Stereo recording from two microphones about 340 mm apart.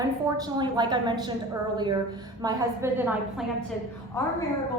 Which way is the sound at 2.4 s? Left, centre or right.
Centre.